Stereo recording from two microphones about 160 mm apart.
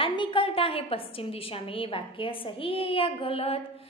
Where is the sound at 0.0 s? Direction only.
30° left (ahead or behind).